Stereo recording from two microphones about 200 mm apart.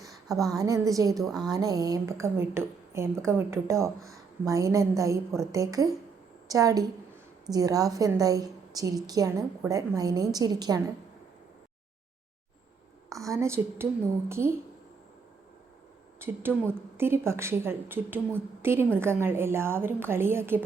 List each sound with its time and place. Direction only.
0.3 s a woman's voice: 20° right (ahead or behind)
1.2 s a woman's voice: centre (ahead or behind)
1.5 s a woman's voice: 20° right (ahead or behind)
13.1 s a woman's voice: 15° right (ahead or behind)
16.2 s a woman's voice: 10° right (ahead or behind)